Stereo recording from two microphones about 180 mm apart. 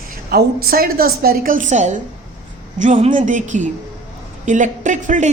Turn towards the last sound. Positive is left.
turn(degrees=-40)  # may be behind; listen again after turning